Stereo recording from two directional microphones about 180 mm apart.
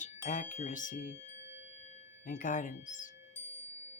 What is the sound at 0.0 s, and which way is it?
Speech, 45° left (ahead or behind).